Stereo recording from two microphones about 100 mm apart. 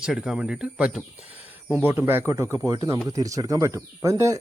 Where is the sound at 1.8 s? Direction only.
20° right (ahead or behind).